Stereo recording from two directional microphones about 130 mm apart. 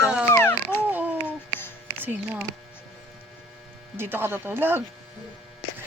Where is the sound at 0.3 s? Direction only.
20° left (ahead or behind).